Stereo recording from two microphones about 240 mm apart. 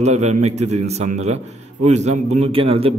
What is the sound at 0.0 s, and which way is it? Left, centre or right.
A man's voice, right.